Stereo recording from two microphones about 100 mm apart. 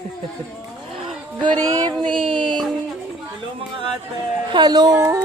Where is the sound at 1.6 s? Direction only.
40° right (ahead or behind).